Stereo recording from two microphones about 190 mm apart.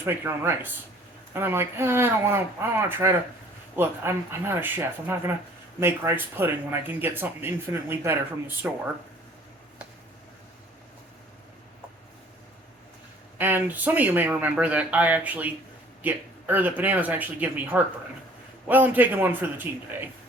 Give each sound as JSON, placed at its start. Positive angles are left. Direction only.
{"t": 0.0, "sound": "speech", "side_deg": -10}
{"t": 13.4, "sound": "speech", "side_deg": -10}